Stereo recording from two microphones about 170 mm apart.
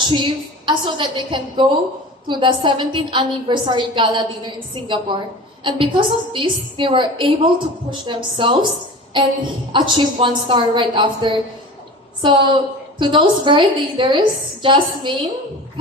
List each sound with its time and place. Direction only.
0.1 s a woman's voice: 30° right (ahead or behind)